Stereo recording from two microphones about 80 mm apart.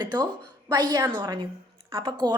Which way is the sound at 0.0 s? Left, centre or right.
Right.